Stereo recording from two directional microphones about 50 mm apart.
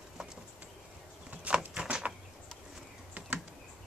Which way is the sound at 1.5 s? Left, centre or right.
Right.